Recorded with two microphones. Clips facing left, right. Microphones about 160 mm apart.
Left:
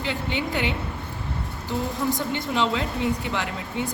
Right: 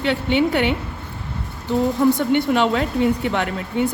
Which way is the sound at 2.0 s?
65° right (ahead or behind).